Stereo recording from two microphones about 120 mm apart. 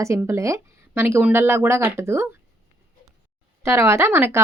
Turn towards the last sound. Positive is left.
turn(degrees=-20)  # may be behind; listen again after turning